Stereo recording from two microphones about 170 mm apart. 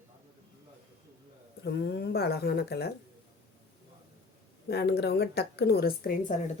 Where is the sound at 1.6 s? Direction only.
80° left.